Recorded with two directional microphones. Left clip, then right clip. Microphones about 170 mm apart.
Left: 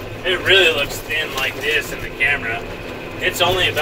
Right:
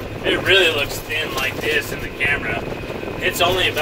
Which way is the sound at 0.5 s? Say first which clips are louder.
Left 2 dB; 5° right (ahead or behind).